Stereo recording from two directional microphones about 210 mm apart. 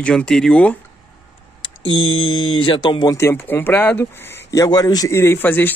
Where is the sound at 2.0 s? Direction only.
75° left (ahead or behind).